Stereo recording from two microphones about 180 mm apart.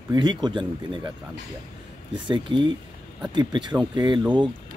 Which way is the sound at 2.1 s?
25° right (ahead or behind).